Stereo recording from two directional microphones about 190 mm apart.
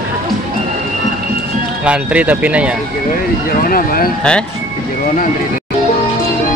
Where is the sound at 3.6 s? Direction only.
50° left (ahead or behind).